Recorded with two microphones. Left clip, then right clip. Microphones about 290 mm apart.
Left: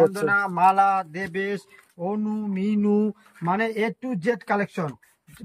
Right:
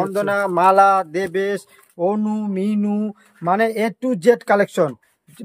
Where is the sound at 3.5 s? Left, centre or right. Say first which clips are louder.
Right 6 dB; centre.